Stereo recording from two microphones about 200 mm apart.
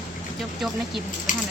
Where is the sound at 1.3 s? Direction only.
40° left (ahead or behind).